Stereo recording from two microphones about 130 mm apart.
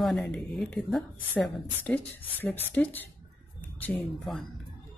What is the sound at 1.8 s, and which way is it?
Speech, 15° left (ahead or behind).